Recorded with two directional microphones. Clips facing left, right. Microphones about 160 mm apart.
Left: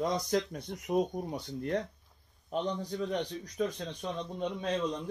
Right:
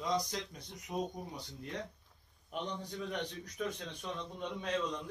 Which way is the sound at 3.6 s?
35° left (ahead or behind).